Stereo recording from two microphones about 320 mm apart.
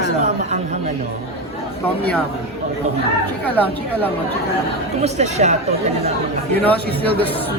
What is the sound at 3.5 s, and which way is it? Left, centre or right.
Speech, centre.